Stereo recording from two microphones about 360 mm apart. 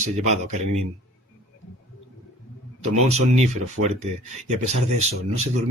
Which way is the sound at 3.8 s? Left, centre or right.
Right.